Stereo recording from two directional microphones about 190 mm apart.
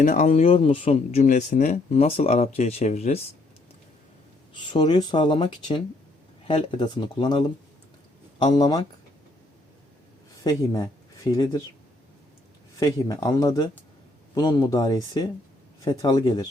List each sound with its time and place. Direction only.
0.0 s speech: 40° left (ahead or behind)
4.5 s speech: 25° left (ahead or behind)
10.4 s speech: 20° left (ahead or behind)
12.8 s speech: 20° left (ahead or behind)